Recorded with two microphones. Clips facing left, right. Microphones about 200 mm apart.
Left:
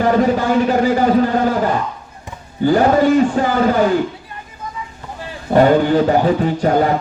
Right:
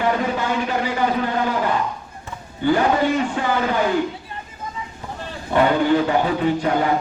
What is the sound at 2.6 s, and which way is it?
Music, 40° left (ahead or behind).